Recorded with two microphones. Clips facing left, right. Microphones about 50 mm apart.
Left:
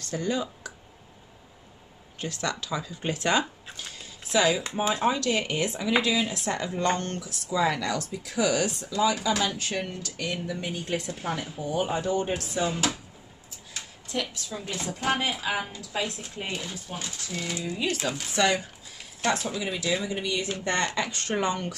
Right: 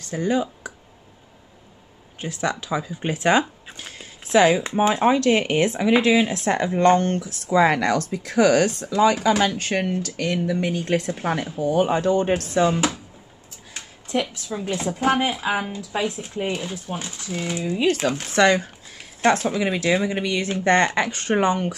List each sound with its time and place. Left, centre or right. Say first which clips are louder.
0.0 s speech: right 6 dB; right
2.1 s speech: right 5 dB; right
3.7 s a sound: right 3 dB; right
4.7 s speech: right 7 dB; right
13.7 s a sound: right 7 dB; right
14.5 s speech: right 8 dB; right
17.7 s speech: right 10 dB; right
21.1 s speech: right 7 dB; right